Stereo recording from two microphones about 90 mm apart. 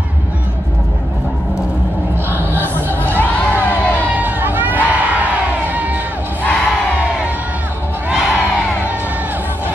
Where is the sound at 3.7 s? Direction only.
20° right (ahead or behind).